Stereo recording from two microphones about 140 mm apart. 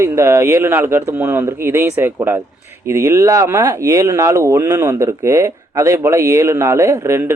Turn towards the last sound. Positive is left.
turn(degrees=-20)  # may be behind; listen again after turning